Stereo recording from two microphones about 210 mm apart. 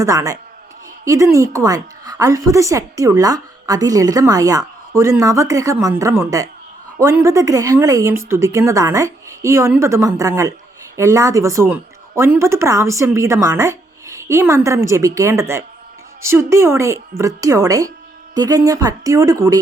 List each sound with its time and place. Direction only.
0.0 s a woman's voice: 15° right (ahead or behind)